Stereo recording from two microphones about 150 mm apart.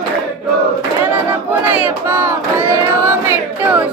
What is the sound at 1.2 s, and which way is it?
Battle cry, 15° right (ahead or behind).